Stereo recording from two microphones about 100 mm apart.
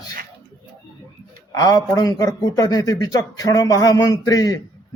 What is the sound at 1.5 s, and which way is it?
A man's voice, 40° left (ahead or behind).